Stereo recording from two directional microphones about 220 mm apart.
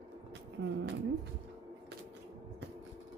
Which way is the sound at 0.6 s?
65° right (ahead or behind).